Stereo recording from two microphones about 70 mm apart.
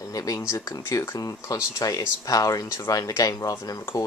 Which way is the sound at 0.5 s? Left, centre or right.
Left.